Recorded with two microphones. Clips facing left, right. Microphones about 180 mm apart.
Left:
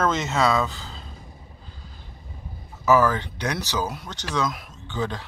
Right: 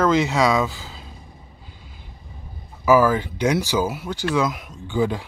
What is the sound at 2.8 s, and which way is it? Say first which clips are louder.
Speech: right 3 dB; 10° right (ahead or behind).